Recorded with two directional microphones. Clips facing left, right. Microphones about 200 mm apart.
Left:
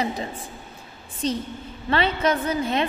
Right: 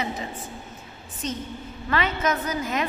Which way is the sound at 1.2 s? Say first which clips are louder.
Left 5 dB; 35° left (ahead or behind).